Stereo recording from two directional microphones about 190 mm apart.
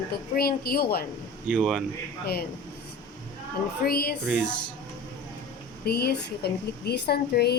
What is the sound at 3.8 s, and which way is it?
Speech, 55° left (ahead or behind).